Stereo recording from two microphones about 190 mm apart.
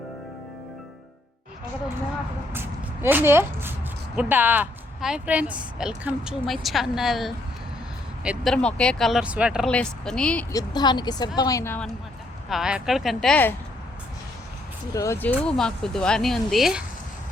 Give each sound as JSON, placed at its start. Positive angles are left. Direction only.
{"t": 2.5, "sound": "speech", "side_deg": -10}
{"t": 8.5, "sound": "speech", "side_deg": 5}
{"t": 10.5, "sound": "a woman's voice", "side_deg": 20}
{"t": 12.5, "sound": "speech", "side_deg": -5}
{"t": 14.9, "sound": "speech", "side_deg": 15}